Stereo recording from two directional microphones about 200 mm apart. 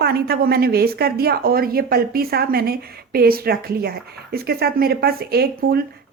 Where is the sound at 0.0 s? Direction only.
50° right (ahead or behind).